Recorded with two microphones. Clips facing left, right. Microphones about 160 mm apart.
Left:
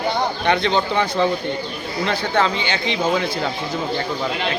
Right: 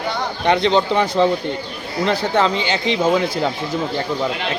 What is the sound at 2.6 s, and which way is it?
Speech, 35° right (ahead or behind).